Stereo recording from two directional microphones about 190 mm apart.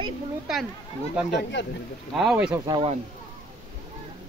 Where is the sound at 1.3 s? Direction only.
65° left (ahead or behind).